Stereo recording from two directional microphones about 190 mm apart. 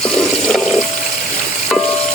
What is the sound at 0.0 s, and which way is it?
Toilet flush, 5° left (ahead or behind).